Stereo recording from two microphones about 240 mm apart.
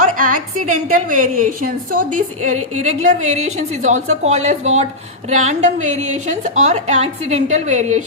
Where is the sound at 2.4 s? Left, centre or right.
Right.